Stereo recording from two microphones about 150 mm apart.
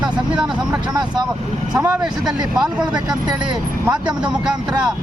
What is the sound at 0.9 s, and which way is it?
Speech, 30° right (ahead or behind).